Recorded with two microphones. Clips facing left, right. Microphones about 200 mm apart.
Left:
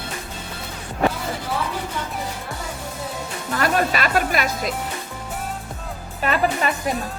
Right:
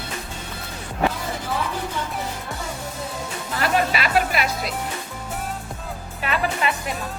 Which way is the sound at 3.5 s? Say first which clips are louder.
Left 1 dB; 45° left (ahead or behind).